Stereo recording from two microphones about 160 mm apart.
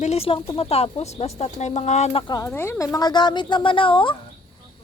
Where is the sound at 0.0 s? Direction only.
40° left (ahead or behind).